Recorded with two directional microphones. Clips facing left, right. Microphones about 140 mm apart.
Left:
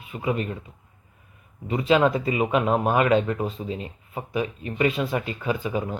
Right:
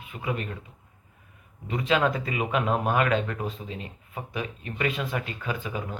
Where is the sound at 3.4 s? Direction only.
40° left (ahead or behind).